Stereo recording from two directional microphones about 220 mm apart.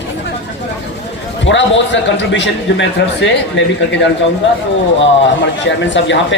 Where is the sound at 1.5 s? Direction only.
55° left (ahead or behind).